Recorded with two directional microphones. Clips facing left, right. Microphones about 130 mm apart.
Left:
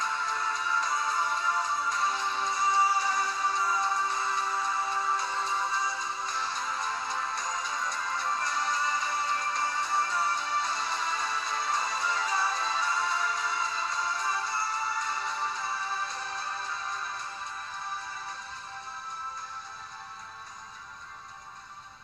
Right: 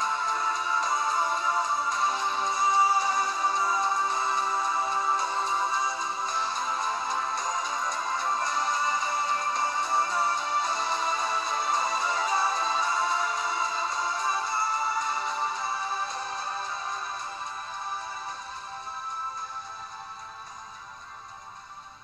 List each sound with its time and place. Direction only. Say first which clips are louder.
0.0 s music: right 3 dB; 20° right (ahead or behind)